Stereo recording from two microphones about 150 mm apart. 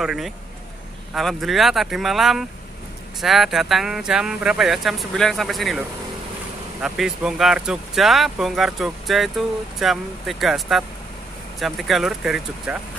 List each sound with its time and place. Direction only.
0.0 s speech: 5° right (ahead or behind)
6.8 s speech: 5° right (ahead or behind)